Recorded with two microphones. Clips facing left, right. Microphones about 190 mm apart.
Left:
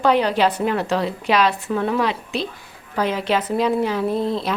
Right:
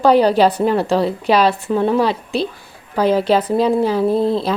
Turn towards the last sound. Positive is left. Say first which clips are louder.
# right 5 dB
turn(degrees=-30)  # may be behind; listen again after turning